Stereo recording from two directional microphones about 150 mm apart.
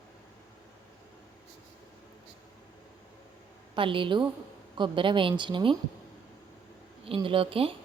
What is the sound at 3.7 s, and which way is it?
A woman's voice, 35° right (ahead or behind).